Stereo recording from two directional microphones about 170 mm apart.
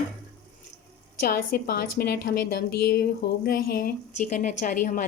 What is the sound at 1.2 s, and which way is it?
A woman's voice, 60° left (ahead or behind).